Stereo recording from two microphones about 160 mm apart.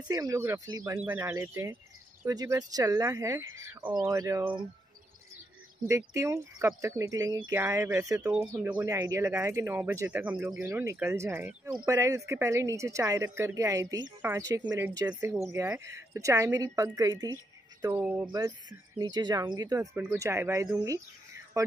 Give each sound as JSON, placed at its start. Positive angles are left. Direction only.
{"t": 0.1, "sound": "speech", "side_deg": -20}
{"t": 5.9, "sound": "speech", "side_deg": -20}
{"t": 8.8, "sound": "speech", "side_deg": -20}
{"t": 10.6, "sound": "speech", "side_deg": -15}
{"t": 17.9, "sound": "speech", "side_deg": -10}
{"t": 18.2, "sound": "speech", "side_deg": -25}